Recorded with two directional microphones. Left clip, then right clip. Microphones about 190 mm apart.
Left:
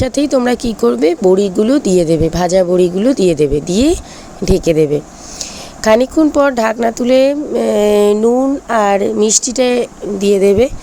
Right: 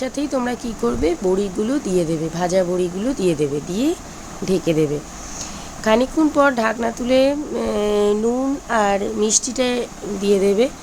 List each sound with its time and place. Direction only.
0.0 s speech: 35° left (ahead or behind)